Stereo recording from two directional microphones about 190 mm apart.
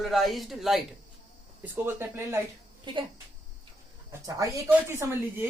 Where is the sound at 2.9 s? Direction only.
25° right (ahead or behind).